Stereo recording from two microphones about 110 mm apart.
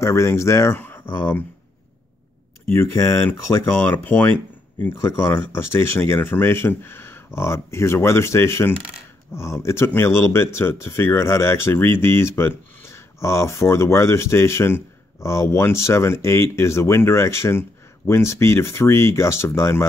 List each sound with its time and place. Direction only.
0.0 s speech: 25° left (ahead or behind)
2.6 s speech: 20° left (ahead or behind)